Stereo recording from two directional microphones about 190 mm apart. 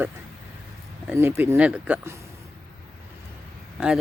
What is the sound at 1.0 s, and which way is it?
Speech, 15° right (ahead or behind).